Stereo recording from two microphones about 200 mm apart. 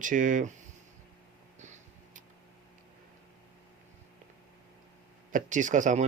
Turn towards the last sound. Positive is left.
turn(degrees=-40)  # may be behind; listen again after turning